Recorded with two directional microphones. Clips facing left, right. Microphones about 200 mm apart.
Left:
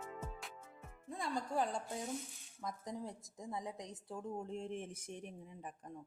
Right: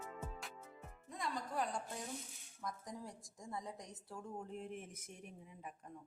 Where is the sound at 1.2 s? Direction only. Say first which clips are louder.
Left 3 dB; 30° left (ahead or behind).